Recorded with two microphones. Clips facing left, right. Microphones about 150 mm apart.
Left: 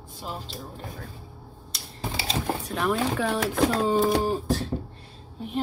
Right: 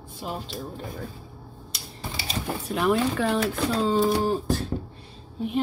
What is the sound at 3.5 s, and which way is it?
Speech, 60° left (ahead or behind).